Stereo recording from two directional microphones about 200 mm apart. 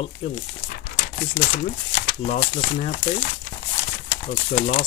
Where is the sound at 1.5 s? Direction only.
45° left (ahead or behind).